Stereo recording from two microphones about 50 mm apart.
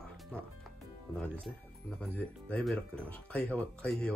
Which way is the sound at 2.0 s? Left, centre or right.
Left.